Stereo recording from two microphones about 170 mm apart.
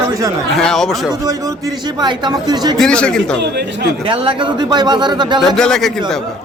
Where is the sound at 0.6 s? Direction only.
5° left (ahead or behind).